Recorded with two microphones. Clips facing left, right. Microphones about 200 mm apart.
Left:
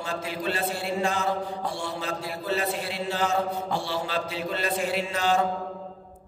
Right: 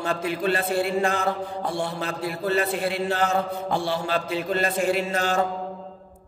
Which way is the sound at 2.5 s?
55° right (ahead or behind).